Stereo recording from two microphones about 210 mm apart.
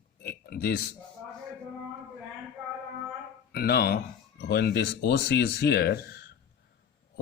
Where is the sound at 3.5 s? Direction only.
50° left (ahead or behind).